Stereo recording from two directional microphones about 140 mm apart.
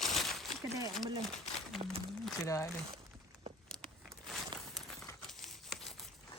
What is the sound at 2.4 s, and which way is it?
Speech, 20° left (ahead or behind).